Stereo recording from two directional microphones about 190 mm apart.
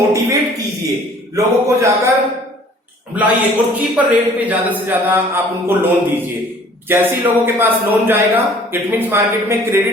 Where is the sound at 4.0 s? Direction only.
5° right (ahead or behind).